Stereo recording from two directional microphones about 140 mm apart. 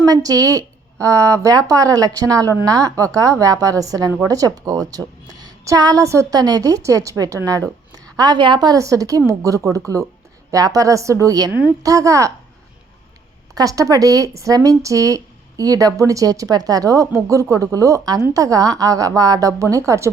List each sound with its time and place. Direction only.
0.0 s speech: 25° right (ahead or behind)
13.6 s speech: 25° right (ahead or behind)